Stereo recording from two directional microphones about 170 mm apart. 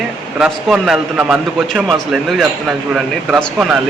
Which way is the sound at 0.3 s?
5° right (ahead or behind).